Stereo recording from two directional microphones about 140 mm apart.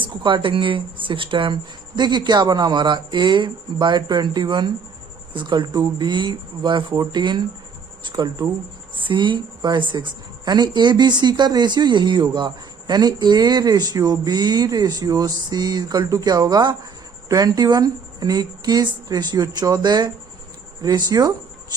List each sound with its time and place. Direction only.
0.0 s a woman's voice: 35° right (ahead or behind)